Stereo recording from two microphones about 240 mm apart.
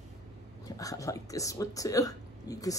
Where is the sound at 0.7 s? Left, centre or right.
Centre.